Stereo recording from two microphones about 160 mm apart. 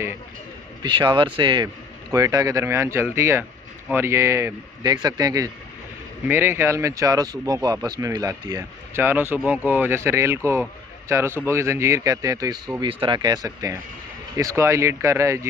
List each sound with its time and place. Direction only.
0.8 s speech: 30° right (ahead or behind)